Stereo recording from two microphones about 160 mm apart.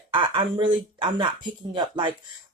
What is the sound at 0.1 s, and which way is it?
Speech, 30° right (ahead or behind).